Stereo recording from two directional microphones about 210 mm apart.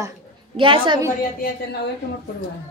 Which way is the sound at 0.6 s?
25° right (ahead or behind).